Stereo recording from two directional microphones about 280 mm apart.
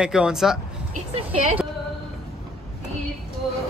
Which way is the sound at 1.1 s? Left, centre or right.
Right.